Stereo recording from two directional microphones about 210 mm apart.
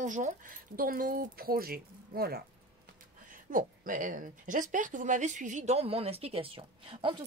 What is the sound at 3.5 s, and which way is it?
Speech, 40° right (ahead or behind).